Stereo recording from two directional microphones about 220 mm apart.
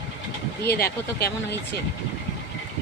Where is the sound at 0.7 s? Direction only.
45° left (ahead or behind).